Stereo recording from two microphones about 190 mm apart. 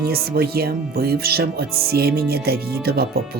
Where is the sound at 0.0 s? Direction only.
55° right (ahead or behind).